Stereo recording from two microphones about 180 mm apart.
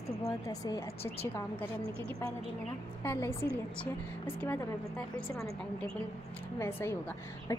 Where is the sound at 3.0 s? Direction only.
15° left (ahead or behind).